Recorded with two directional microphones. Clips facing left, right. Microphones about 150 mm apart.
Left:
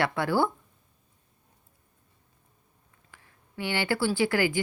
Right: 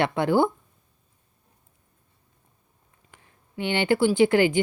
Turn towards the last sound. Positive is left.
turn(degrees=-20)  # may be behind; listen again after turning